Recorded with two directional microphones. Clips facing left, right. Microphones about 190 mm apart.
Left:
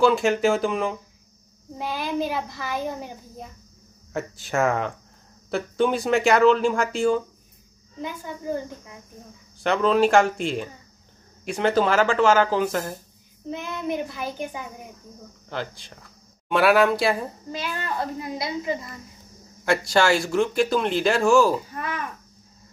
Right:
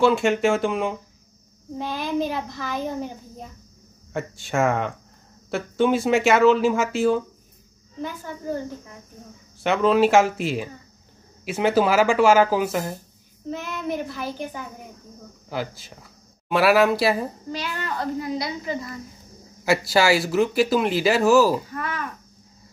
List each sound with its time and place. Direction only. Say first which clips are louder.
0.0 s a child's voice: even; centre (ahead or behind)
8.0 s a child's voice: right 1 dB; 15° left (ahead or behind)
9.6 s speech: right 1 dB; centre (ahead or behind)
13.5 s a child's voice: even; 15° left (ahead or behind)
15.5 s speech: right 2 dB; 5° right (ahead or behind)
17.9 s a woman's voice: right 6 dB; 25° left (ahead or behind)
19.6 s speech: right 1 dB; 5° right (ahead or behind)
21.7 s a woman's voice: right 1 dB; 20° left (ahead or behind)